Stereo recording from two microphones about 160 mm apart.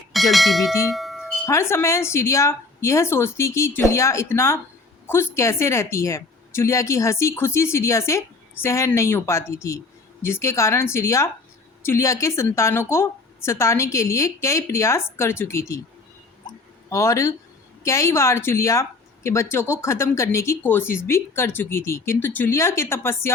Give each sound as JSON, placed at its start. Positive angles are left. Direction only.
{"t": 0.1, "sound": "speech", "side_deg": 0}
{"t": 0.9, "sound": "bell", "side_deg": 0}
{"t": 1.5, "sound": "speech", "side_deg": 15}
{"t": 16.9, "sound": "speech", "side_deg": 20}